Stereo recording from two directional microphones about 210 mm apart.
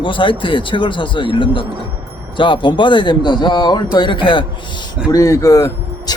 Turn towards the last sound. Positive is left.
turn(degrees=15)  # may be behind; listen again after turning